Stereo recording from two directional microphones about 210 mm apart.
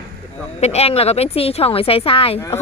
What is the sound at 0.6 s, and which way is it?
Speech, 30° left (ahead or behind).